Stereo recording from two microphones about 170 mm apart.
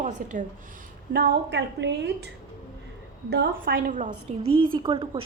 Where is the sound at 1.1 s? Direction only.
65° right (ahead or behind); by 2.3 s 90° right.